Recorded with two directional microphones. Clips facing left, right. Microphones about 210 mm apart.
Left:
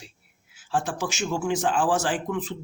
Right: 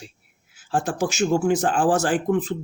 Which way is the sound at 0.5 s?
45° right (ahead or behind).